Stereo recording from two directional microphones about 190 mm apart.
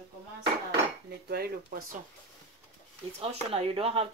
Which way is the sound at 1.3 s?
50° right (ahead or behind).